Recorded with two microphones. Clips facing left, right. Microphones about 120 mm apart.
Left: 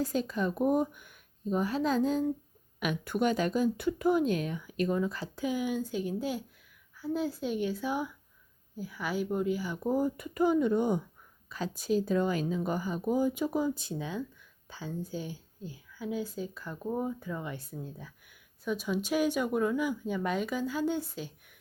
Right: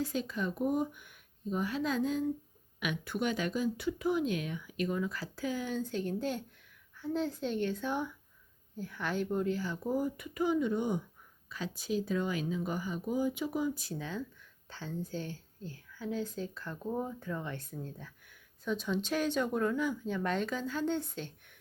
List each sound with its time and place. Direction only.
0.0 s speech: 40° left (ahead or behind); by 10.1 s 20° left (ahead or behind)
10.2 s speech: 45° left (ahead or behind)
13.7 s speech: 20° left (ahead or behind)